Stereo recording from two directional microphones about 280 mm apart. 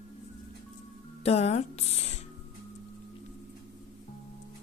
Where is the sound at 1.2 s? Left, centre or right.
Left.